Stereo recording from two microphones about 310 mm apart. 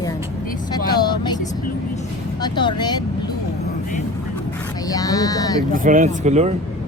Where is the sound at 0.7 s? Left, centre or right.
Centre.